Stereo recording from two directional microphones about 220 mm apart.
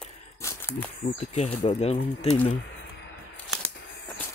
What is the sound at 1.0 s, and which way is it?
Speech, 30° left (ahead or behind).